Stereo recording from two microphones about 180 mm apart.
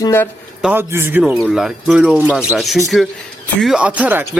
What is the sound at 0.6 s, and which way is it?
A man's voice, 10° right (ahead or behind).